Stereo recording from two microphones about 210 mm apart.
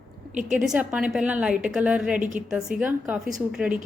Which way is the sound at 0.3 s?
35° right (ahead or behind).